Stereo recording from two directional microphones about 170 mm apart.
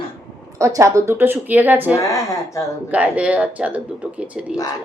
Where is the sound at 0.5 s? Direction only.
20° right (ahead or behind).